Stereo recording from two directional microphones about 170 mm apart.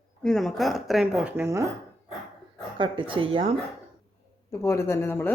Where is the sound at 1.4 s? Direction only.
15° right (ahead or behind).